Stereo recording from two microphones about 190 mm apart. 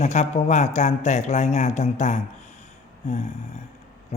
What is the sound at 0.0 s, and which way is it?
A man's voice, 35° left (ahead or behind).